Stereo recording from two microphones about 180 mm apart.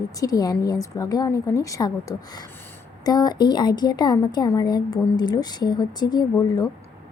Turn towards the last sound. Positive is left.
turn(degrees=20)  # may be behind; listen again after turning